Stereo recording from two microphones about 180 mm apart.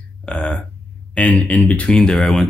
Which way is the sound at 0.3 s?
5° left (ahead or behind).